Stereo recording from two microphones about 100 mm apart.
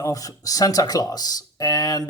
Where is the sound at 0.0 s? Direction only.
35° left (ahead or behind).